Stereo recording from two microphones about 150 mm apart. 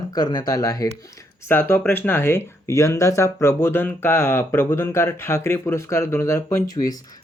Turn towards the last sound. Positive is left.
turn(degrees=25)  # may be behind; listen again after turning